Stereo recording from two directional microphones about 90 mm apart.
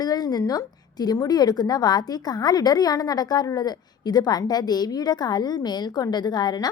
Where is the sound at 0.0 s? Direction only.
45° left (ahead or behind).